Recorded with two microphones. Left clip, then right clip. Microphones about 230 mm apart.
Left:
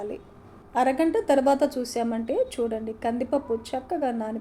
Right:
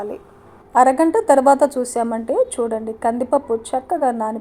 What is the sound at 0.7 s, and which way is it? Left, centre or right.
A woman's voice, right.